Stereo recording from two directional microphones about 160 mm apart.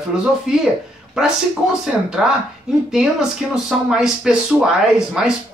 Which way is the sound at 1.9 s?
5° right (ahead or behind).